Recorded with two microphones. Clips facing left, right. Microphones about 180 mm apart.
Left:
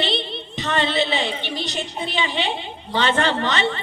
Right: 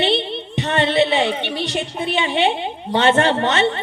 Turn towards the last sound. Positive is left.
turn(degrees=-55)  # may be behind; listen again after turning